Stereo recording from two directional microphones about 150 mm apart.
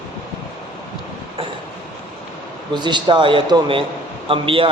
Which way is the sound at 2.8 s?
30° right (ahead or behind).